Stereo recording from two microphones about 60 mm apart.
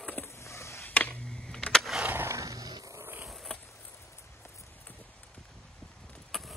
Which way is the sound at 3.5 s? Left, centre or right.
Centre.